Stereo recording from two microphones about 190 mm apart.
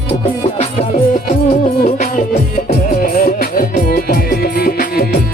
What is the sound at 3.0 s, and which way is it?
Music, 50° left (ahead or behind).